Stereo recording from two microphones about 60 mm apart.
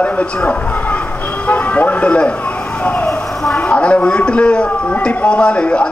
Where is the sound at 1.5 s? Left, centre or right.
Left.